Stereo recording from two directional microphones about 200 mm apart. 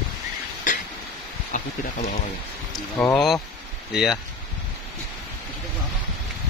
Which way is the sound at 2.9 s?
10° left (ahead or behind).